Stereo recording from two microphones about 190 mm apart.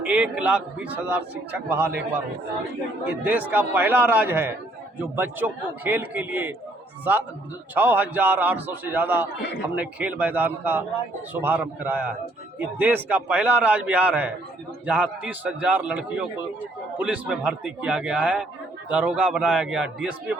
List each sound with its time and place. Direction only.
0.0 s a man's voice: 5° right (ahead or behind)
3.1 s a man's voice: 10° right (ahead or behind)
7.8 s a man's voice: 10° right (ahead or behind)